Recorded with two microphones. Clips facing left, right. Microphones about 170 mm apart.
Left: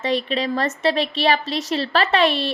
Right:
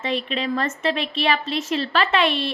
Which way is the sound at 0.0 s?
40° left (ahead or behind).